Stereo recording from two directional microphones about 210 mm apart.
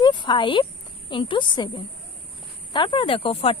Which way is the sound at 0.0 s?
25° left (ahead or behind).